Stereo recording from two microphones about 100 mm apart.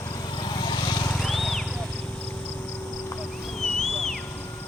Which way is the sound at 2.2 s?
25° left (ahead or behind).